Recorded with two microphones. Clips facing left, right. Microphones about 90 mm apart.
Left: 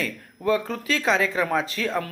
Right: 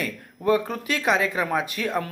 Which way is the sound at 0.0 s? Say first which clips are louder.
Right 1 dB; 15° right (ahead or behind).